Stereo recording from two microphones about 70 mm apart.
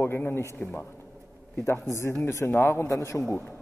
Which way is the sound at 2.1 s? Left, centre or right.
Left.